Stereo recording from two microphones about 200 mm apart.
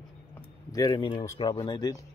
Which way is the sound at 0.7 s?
20° left (ahead or behind).